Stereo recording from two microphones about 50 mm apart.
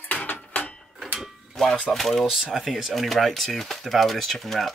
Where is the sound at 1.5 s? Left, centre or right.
Centre.